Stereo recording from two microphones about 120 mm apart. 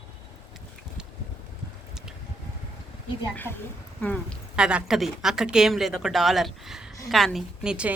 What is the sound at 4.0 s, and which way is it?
Speech, 10° left (ahead or behind).